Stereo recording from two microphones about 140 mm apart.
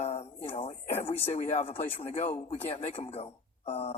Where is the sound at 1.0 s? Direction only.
45° left (ahead or behind).